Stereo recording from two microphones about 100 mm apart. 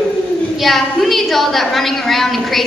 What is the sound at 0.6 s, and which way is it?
A woman's voice, centre (ahead or behind).